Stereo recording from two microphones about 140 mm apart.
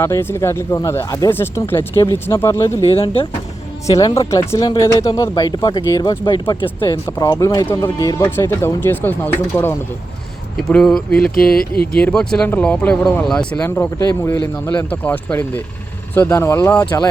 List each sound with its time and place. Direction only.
0.0 s speech: 15° left (ahead or behind)
2.8 s speech: 45° left (ahead or behind)
3.9 s speech: 25° left (ahead or behind)
6.7 s speech: 20° left (ahead or behind)
11.3 s speech: 90° left
11.9 s speech: 5° left (ahead or behind)